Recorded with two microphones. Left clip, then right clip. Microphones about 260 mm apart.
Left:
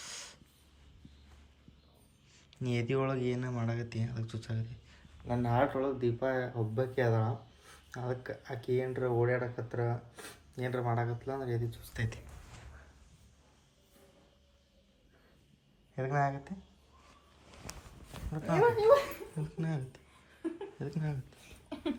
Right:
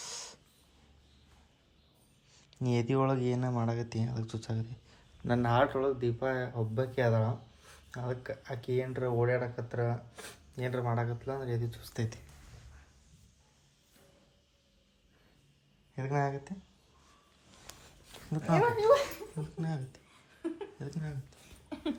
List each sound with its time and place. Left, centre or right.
0.0 s a sound: centre
2.5 s speech: centre
5.6 s speech: centre
16.0 s speech: centre
18.3 s speech: centre
19.4 s speech: centre
20.4 s a sound: centre